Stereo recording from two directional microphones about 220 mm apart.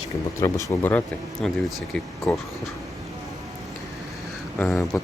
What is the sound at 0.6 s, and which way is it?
Speech, 10° left (ahead or behind).